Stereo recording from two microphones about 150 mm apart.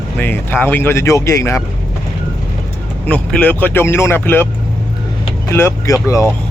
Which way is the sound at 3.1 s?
10° left (ahead or behind).